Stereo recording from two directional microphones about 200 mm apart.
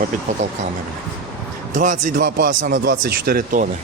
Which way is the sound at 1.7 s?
40° right (ahead or behind).